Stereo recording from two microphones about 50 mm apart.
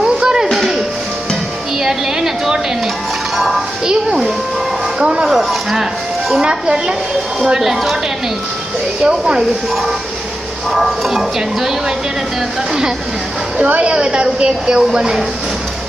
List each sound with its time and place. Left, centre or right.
0.0 s music: centre
0.5 s music: centre
1.8 s a sound: centre
3.8 s a woman's voice: centre
5.3 s speech: centre
6.4 s a woman's voice: centre
9.0 s a woman's voice: centre
10.7 s a sound: centre
11.1 s a woman's voice: centre
13.6 s a woman's voice: right